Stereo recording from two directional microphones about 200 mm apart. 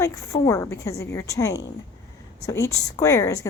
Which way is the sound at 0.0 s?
15° left (ahead or behind).